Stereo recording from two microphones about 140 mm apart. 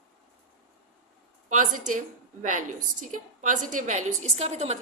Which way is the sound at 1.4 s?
70° right (ahead or behind).